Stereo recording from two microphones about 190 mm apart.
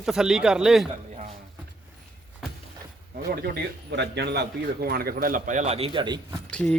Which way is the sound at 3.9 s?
65° right (ahead or behind).